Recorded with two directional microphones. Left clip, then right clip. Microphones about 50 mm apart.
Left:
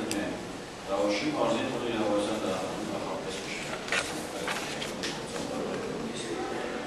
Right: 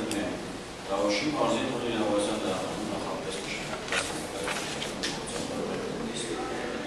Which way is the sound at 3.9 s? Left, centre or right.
Left.